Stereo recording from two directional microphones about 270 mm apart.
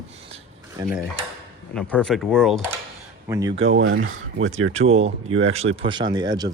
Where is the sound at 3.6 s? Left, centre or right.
Right.